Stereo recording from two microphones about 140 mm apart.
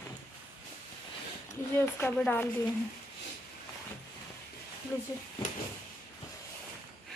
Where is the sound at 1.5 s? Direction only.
15° left (ahead or behind).